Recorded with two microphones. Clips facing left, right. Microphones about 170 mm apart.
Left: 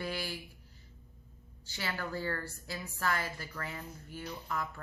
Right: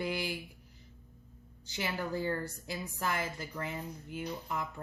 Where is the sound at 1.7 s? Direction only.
20° right (ahead or behind).